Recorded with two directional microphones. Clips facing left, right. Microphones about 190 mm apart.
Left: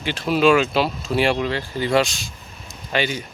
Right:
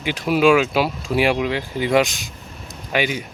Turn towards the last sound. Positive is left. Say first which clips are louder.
# right 1 dB
turn(degrees=-10)  # may be behind; listen again after turning